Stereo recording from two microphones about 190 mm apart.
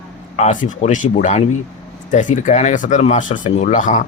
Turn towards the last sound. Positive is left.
turn(degrees=40)  # may be behind; listen again after turning